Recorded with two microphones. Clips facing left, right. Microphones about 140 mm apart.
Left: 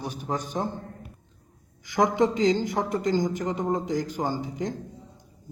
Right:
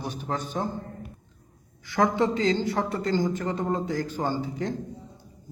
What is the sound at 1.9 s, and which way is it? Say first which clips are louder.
Speech: left 1 dB; 15° left (ahead or behind).